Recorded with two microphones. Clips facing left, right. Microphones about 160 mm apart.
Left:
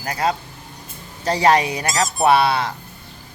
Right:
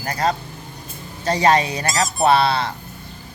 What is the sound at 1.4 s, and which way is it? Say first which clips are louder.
Speech: left 1 dB; 15° left (ahead or behind).